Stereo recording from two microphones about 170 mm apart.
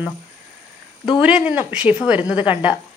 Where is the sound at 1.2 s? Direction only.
5° right (ahead or behind).